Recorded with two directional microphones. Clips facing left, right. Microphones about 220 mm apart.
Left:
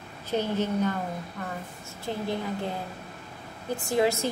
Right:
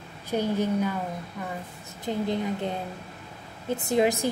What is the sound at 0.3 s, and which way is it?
A woman's voice, 10° right (ahead or behind).